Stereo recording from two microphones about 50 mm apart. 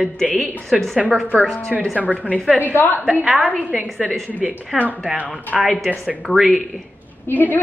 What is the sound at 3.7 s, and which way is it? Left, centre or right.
A woman's voice, centre.